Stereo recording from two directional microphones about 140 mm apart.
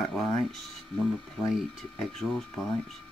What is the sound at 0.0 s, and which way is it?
Speech, 5° left (ahead or behind).